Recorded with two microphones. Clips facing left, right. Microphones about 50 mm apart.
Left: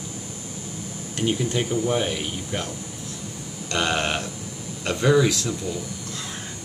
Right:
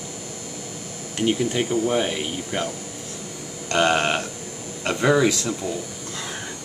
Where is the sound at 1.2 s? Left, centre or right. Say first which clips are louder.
Right 2 dB; centre.